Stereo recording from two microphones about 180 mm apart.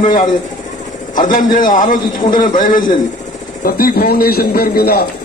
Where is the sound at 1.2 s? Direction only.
45° left (ahead or behind).